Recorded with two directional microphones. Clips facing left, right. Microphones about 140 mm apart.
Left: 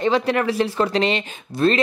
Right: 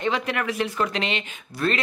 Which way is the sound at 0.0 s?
35° left (ahead or behind).